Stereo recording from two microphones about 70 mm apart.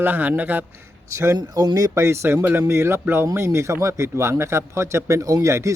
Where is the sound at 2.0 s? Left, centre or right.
Right.